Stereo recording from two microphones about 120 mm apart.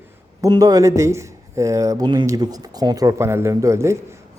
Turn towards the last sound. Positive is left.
turn(degrees=-25)  # may be behind; listen again after turning